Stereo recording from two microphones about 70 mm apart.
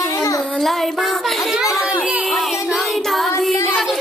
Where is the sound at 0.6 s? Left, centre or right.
Centre.